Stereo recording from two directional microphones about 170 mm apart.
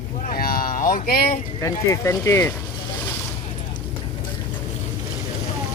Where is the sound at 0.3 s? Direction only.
60° left (ahead or behind).